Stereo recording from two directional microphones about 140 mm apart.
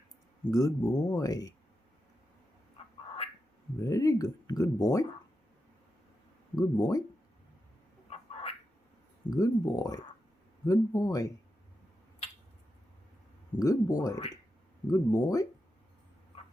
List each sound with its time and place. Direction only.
0.4 s speech: 25° left (ahead or behind)
3.8 s speech: 25° left (ahead or behind)
6.6 s speech: 25° left (ahead or behind)
8.1 s a sound: 45° left (ahead or behind)
9.3 s speech: 25° left (ahead or behind)
13.6 s speech: 25° left (ahead or behind)